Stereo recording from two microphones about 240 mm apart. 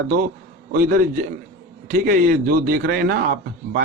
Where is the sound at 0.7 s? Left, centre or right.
Right.